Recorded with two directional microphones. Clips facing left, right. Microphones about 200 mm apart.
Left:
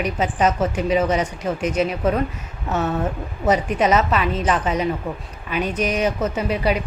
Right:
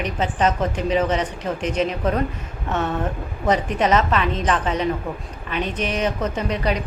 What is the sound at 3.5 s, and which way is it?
Speech, 10° left (ahead or behind).